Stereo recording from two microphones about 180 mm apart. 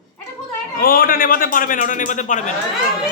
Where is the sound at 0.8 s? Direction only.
55° left (ahead or behind).